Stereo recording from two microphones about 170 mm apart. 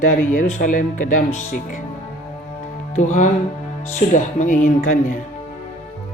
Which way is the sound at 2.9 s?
45° left (ahead or behind).